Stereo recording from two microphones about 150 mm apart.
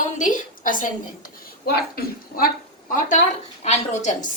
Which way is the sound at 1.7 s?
90° left.